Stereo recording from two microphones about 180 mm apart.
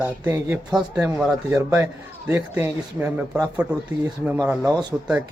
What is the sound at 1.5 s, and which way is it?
A man's voice, 15° right (ahead or behind).